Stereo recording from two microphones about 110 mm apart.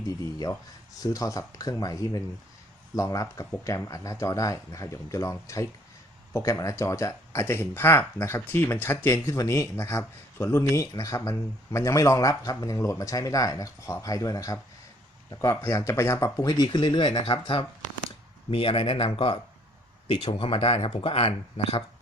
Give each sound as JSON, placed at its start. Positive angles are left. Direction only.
{"t": 0.1, "sound": "speech", "side_deg": 35}